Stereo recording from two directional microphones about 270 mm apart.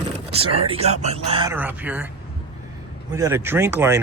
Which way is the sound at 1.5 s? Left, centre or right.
Centre.